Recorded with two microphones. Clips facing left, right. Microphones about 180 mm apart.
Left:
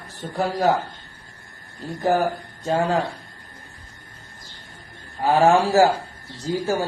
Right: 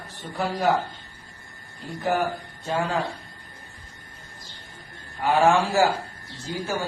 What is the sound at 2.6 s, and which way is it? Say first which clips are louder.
Speech: left 5 dB; 40° left (ahead or behind).